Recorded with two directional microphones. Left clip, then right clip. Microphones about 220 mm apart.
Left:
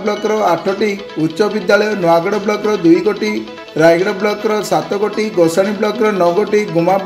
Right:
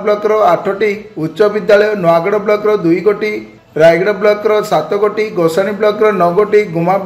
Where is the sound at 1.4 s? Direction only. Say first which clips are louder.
Right 4 dB; 45° left (ahead or behind).